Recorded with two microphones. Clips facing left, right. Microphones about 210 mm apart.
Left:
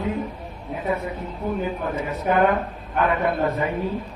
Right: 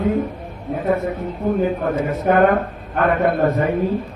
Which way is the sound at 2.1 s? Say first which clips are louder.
Right 4 dB; 50° right (ahead or behind).